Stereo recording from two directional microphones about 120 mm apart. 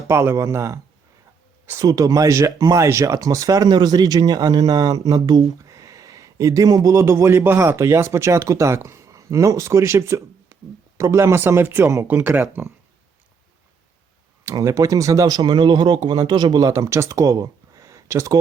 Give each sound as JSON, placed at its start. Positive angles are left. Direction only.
{"t": 0.1, "sound": "speech", "side_deg": -20}
{"t": 14.5, "sound": "speech", "side_deg": -30}